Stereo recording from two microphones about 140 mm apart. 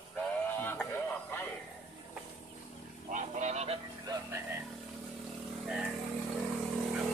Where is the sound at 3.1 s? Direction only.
60° right (ahead or behind).